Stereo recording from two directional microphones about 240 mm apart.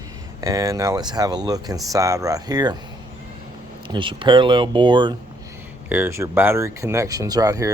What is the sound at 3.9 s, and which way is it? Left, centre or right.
Speech, right.